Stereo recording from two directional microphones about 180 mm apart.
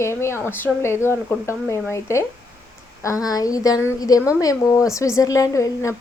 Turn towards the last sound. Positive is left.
turn(degrees=15)  # may be behind; listen again after turning